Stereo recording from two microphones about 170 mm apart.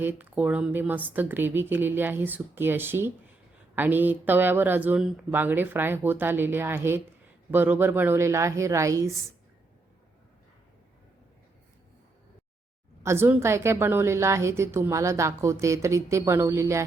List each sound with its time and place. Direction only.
0.0 s a woman's voice: 10° right (ahead or behind)
13.0 s a woman's voice: 15° right (ahead or behind)